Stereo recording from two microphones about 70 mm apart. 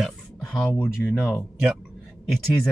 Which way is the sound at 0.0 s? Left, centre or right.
Centre.